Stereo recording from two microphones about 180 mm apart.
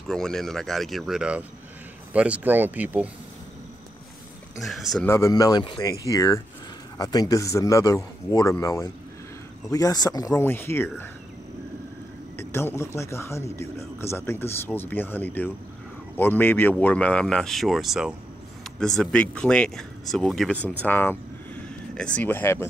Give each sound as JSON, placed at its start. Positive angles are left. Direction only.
{"t": 0.1, "sound": "speech", "side_deg": 5}
{"t": 4.6, "sound": "speech", "side_deg": 0}
{"t": 5.0, "sound": "speech", "side_deg": 15}
{"t": 12.4, "sound": "speech", "side_deg": 15}